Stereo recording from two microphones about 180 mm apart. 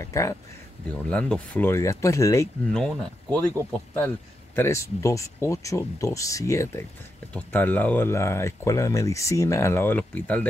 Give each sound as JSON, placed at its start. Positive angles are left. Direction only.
{"t": 0.0, "sound": "speech", "side_deg": 15}
{"t": 2.7, "sound": "speech", "side_deg": 5}
{"t": 4.6, "sound": "speech", "side_deg": 15}